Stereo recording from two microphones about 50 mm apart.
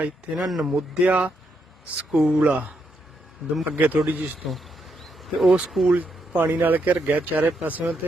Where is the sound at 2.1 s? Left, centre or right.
Centre.